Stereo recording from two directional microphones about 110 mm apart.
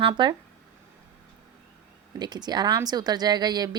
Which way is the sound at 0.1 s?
40° right (ahead or behind).